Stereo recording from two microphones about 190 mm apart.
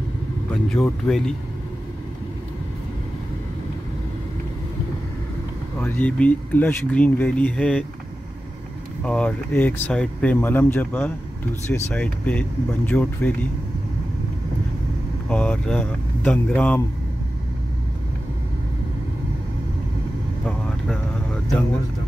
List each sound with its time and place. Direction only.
0.7 s speech: 5° left (ahead or behind)
5.8 s speech: 5° left (ahead or behind)
9.0 s speech: 5° left (ahead or behind)
15.2 s speech: 5° left (ahead or behind)
20.4 s vehicle: 5° left (ahead or behind)